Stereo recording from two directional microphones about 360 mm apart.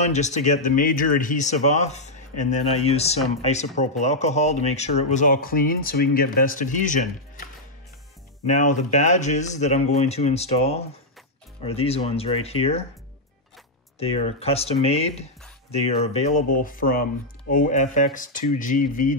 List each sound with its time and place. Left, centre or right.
0.0 s speech: centre
8.5 s speech: centre
13.9 s speech: centre